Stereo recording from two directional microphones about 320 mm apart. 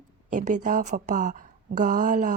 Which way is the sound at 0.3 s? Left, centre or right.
Right.